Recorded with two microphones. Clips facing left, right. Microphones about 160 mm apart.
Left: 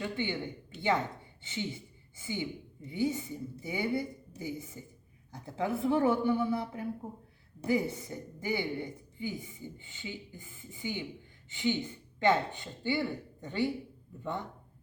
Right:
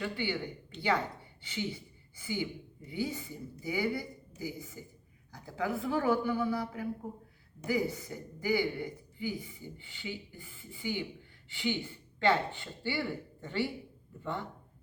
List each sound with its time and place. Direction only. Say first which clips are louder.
0.0 s a woman's voice: even; 20° left (ahead or behind)